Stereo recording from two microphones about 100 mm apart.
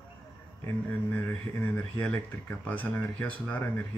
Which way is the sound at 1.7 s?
10° left (ahead or behind).